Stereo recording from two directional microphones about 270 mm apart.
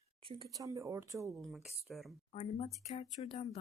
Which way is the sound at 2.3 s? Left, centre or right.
Left.